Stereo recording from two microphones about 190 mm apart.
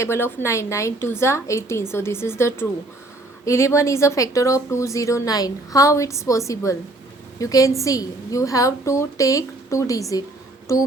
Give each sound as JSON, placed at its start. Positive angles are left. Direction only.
{"t": 0.0, "sound": "speech", "side_deg": 10}